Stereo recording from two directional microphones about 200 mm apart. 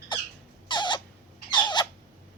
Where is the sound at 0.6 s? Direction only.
20° left (ahead or behind).